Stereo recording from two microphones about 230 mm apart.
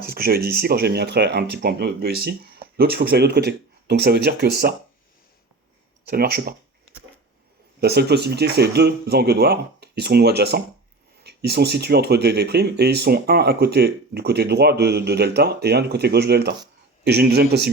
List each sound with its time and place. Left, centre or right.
0.0 s speech: right
6.1 s speech: right
7.8 s speech: right